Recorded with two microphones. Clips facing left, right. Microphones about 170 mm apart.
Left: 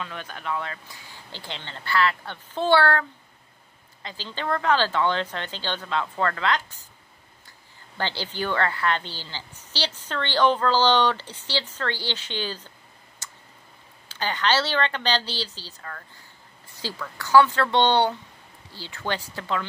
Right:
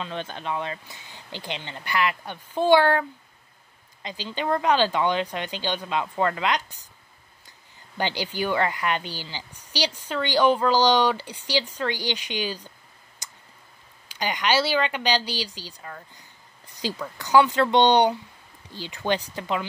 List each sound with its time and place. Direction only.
0.0 s a woman's voice: 25° right (ahead or behind)
8.0 s a woman's voice: 15° right (ahead or behind)
13.2 s tick: 15° right (ahead or behind)
14.0 s a woman's voice: 15° right (ahead or behind)